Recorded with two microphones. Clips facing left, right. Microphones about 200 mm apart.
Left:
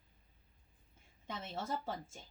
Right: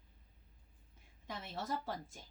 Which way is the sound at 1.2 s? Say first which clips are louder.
Left 1 dB; 25° left (ahead or behind).